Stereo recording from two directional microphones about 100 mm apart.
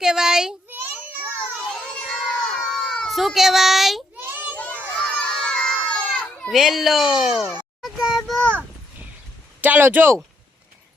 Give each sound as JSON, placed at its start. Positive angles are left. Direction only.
{"t": 0.0, "sound": "a child's voice", "side_deg": -5}
{"t": 0.7, "sound": "a sound", "side_deg": -20}
{"t": 1.7, "sound": "a sound", "side_deg": 5}
{"t": 4.2, "sound": "child singing", "side_deg": -20}
{"t": 4.5, "sound": "children playing", "side_deg": 15}
{"t": 5.0, "sound": "crowd", "side_deg": 10}
{"t": 6.5, "sound": "speech", "side_deg": 0}
{"t": 7.8, "sound": "child singing", "side_deg": -5}
{"t": 9.6, "sound": "speech", "side_deg": -20}